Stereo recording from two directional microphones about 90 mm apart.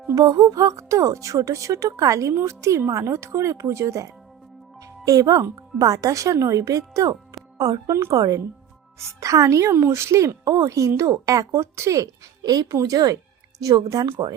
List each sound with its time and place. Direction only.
0.1 s speech: 40° right (ahead or behind)
14.2 s speech: 55° right (ahead or behind)